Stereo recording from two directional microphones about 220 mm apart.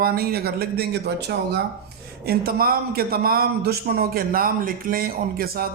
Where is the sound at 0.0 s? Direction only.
45° right (ahead or behind).